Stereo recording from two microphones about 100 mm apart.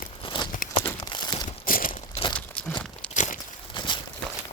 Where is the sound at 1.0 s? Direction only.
45° left (ahead or behind).